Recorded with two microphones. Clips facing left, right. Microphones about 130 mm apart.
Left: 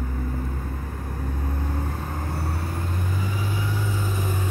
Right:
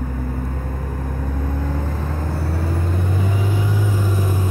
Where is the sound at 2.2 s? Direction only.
90° right.